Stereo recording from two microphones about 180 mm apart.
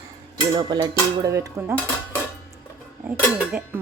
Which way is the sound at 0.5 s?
25° right (ahead or behind).